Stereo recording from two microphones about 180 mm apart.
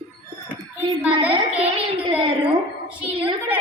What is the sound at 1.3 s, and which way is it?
Speech, 30° right (ahead or behind).